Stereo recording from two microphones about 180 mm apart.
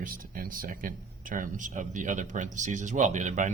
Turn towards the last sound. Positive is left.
turn(degrees=-45)  # may be behind; listen again after turning